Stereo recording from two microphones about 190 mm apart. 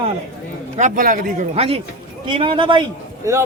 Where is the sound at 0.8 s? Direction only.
45° right (ahead or behind).